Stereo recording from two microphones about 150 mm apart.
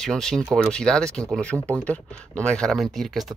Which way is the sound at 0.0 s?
5° left (ahead or behind).